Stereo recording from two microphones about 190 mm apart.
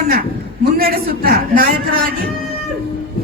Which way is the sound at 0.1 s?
50° right (ahead or behind).